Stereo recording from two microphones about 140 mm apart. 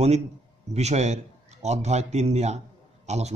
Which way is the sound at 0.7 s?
50° right (ahead or behind).